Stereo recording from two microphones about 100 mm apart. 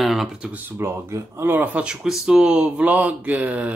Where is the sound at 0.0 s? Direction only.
Centre (ahead or behind).